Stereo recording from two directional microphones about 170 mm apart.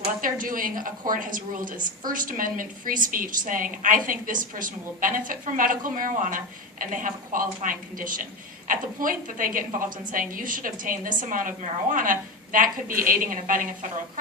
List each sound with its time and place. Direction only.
0.2 s a woman's voice: 55° right (ahead or behind)